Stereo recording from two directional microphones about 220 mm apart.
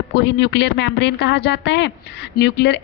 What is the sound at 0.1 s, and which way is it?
A woman's voice, 50° left (ahead or behind).